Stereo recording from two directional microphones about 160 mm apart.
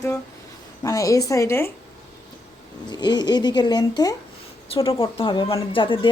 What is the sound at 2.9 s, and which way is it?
A woman's voice, 25° left (ahead or behind).